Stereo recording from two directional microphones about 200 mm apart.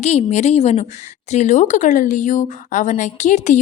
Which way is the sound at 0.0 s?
35° left (ahead or behind).